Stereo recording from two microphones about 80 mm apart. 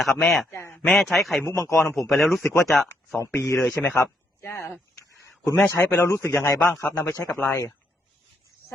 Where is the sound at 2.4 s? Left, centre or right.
Left.